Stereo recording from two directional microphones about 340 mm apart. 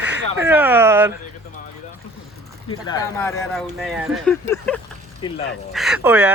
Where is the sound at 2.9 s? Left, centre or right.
Centre.